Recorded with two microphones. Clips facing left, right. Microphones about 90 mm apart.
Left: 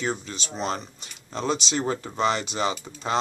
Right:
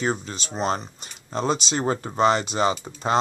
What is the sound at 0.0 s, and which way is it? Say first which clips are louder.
Speech: right 3 dB; 40° right (ahead or behind).